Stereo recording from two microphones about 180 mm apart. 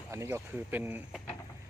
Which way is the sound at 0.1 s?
15° right (ahead or behind).